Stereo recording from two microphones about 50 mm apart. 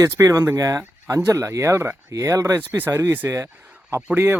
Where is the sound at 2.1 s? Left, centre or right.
Right.